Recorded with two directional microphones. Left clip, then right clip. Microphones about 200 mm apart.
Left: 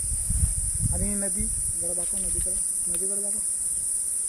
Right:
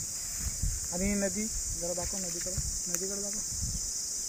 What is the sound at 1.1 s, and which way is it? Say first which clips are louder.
Speech: right 3 dB; 35° right (ahead or behind).